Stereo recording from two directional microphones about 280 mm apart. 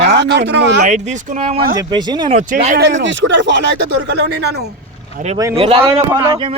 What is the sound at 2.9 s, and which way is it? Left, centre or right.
Speech, right.